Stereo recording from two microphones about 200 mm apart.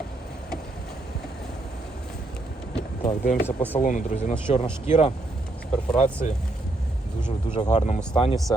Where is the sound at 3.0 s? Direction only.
35° left (ahead or behind).